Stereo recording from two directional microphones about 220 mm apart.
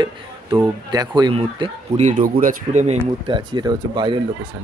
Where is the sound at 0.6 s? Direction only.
20° right (ahead or behind).